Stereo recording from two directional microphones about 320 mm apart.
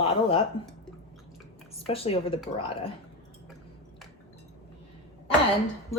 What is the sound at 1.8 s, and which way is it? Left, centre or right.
Speech, centre.